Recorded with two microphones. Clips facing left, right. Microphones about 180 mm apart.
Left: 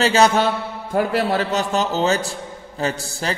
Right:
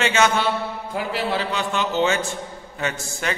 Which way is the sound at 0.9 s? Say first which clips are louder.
Left 6 dB; 50° left (ahead or behind).